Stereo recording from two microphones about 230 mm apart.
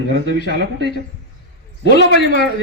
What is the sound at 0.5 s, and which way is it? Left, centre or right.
Speech, right.